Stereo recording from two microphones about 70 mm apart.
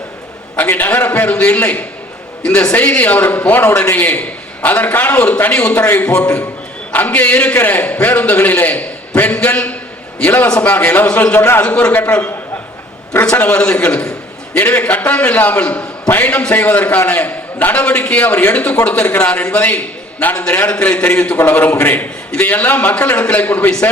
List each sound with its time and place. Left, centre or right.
0.5 s a man's voice: left
11.3 s a man's voice: left
11.6 s a man's voice: centre
13.3 s a man's voice: left